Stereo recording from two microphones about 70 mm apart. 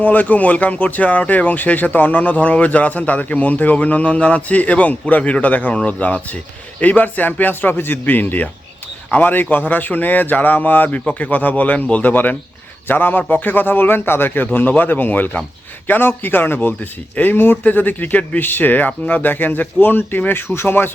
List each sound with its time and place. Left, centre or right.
0.0 s speech: left